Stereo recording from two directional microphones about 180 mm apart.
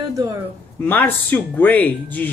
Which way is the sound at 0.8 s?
10° left (ahead or behind).